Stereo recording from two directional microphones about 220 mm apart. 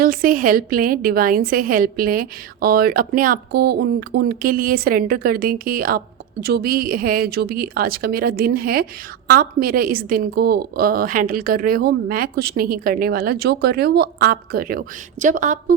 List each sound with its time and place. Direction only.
0.0 s a woman's voice: 40° right (ahead or behind)